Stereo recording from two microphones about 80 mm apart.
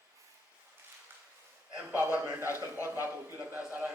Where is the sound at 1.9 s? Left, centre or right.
Right.